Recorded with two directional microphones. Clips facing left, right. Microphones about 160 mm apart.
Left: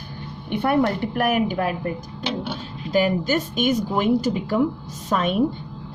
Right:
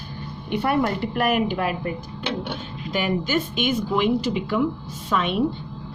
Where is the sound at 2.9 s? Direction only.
40° left (ahead or behind).